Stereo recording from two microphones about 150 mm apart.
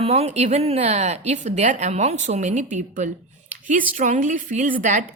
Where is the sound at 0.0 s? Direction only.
45° right (ahead or behind).